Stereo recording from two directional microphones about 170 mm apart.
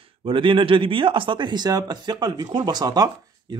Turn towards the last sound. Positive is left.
turn(degrees=-20)  # may be behind; listen again after turning